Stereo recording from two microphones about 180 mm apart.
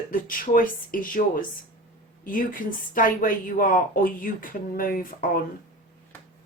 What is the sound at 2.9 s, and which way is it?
Speech, 50° left (ahead or behind).